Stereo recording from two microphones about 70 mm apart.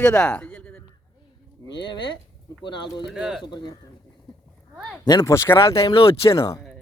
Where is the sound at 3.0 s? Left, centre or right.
Centre.